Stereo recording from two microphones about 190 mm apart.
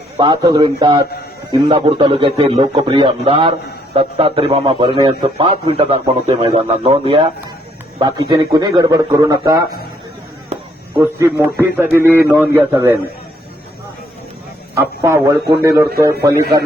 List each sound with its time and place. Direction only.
0.2 s speech: 25° right (ahead or behind)
10.9 s a man's voice: 15° right (ahead or behind)
14.8 s a man's voice: 15° right (ahead or behind)